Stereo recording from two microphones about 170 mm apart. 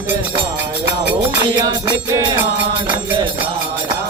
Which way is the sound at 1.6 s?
25° right (ahead or behind).